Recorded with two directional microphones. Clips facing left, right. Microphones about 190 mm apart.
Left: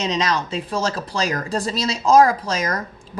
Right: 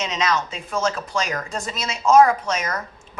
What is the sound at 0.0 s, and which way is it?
Speech, 35° left (ahead or behind).